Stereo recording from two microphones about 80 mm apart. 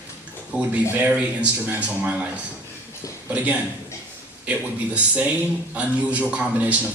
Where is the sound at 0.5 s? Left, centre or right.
Centre.